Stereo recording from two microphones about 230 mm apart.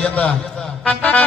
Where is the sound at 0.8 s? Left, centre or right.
Centre.